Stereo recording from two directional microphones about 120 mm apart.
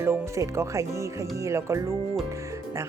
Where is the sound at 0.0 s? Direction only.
20° right (ahead or behind).